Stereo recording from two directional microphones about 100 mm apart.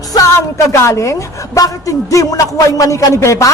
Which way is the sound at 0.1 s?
35° left (ahead or behind).